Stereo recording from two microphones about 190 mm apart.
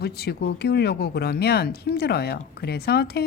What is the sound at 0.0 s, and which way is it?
Speech, 60° left (ahead or behind).